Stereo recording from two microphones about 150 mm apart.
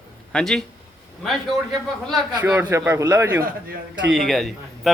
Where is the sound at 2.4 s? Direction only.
15° right (ahead or behind).